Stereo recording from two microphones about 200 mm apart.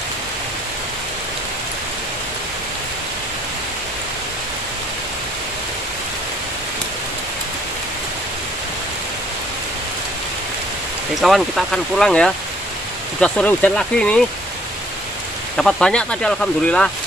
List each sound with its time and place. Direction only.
11.1 s speech: centre (ahead or behind)
15.5 s speech: 5° left (ahead or behind)